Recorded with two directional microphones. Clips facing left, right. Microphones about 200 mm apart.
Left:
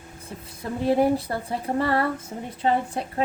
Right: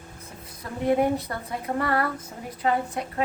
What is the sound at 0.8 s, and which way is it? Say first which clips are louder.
Speech: left 2 dB; 30° left (ahead or behind).